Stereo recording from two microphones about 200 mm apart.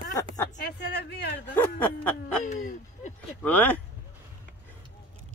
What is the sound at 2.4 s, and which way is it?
Speech, 40° left (ahead or behind).